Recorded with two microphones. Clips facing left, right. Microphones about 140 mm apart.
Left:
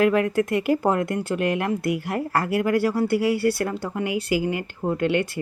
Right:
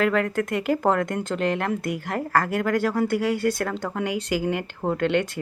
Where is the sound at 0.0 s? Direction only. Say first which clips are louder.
Left 3 dB; 10° left (ahead or behind).